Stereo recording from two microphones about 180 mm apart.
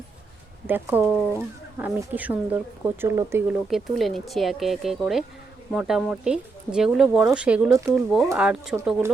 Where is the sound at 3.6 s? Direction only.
Centre (ahead or behind).